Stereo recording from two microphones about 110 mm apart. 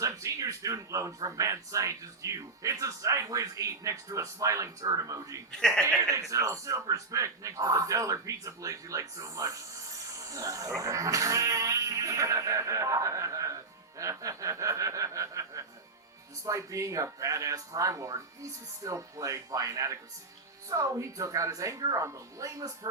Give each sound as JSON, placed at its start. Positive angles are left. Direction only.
{"t": 0.0, "sound": "speech", "side_deg": -30}
{"t": 5.5, "sound": "a man's voice", "side_deg": 5}
{"t": 6.0, "sound": "speech", "side_deg": -30}
{"t": 14.0, "sound": "chuckle", "side_deg": -30}
{"t": 16.5, "sound": "speech", "side_deg": -30}